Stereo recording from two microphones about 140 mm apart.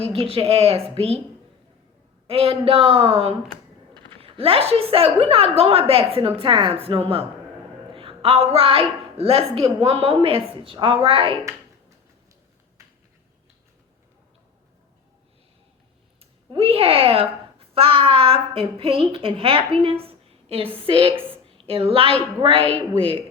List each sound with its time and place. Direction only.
0.0 s speech: 45° right (ahead or behind)
2.2 s a man's voice: 45° right (ahead or behind)
16.5 s a woman's voice: 40° right (ahead or behind)